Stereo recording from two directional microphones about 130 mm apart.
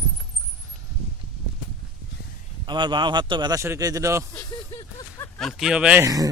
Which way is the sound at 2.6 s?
35° right (ahead or behind).